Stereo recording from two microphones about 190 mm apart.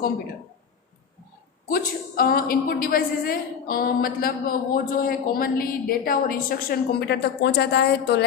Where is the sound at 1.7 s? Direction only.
50° left (ahead or behind).